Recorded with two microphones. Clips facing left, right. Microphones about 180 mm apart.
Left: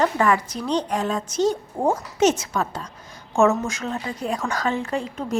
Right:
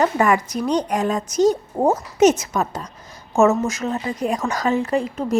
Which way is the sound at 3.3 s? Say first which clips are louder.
Right 3 dB; centre (ahead or behind).